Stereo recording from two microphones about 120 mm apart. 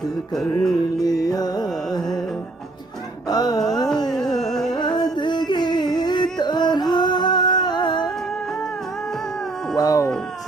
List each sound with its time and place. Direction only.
0.3 s music: 5° left (ahead or behind)
1.0 s music: 30° left (ahead or behind)
1.9 s music: 5° left (ahead or behind)
3.3 s music: 35° left (ahead or behind)
4.1 s music: 5° left (ahead or behind)
4.7 s music: 40° left (ahead or behind)
9.8 s a sound: 30° left (ahead or behind)